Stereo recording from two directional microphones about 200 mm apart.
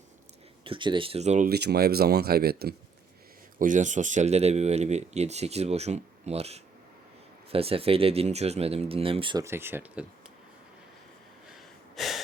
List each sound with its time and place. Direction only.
0.6 s speech: 25° right (ahead or behind)
1.5 s speech: 55° right (ahead or behind)
3.6 s speech: 40° right (ahead or behind)
9.4 s speech: 10° right (ahead or behind)
11.5 s a sound: centre (ahead or behind)